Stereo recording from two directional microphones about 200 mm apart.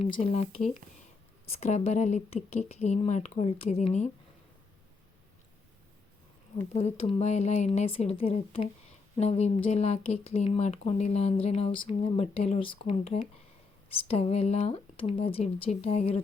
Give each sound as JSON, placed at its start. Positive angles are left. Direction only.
{"t": 0.0, "sound": "speech", "side_deg": 30}
{"t": 6.7, "sound": "speech", "side_deg": 30}